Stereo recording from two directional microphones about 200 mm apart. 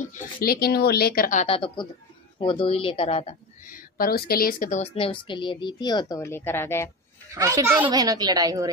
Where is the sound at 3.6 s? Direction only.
45° left (ahead or behind); by 6.9 s 10° left (ahead or behind).